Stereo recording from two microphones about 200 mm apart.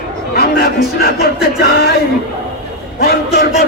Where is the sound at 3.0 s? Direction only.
50° left (ahead or behind).